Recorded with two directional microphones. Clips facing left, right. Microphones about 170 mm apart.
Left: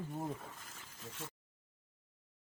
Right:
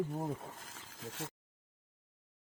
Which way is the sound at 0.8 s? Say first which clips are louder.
Right 5 dB; 90° right.